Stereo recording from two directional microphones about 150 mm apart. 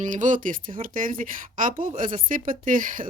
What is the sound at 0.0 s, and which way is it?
Speech, 60° right (ahead or behind).